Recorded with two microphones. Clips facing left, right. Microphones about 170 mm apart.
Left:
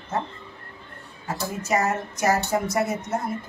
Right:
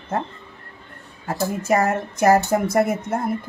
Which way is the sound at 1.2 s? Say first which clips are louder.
Right 6 dB; 55° right (ahead or behind).